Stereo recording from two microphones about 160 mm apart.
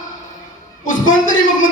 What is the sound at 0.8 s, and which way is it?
Speech, 55° left (ahead or behind).